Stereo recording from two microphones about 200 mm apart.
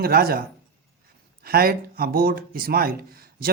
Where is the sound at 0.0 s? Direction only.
50° right (ahead or behind).